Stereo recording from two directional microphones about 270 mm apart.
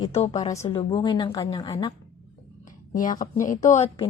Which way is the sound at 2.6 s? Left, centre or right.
Left.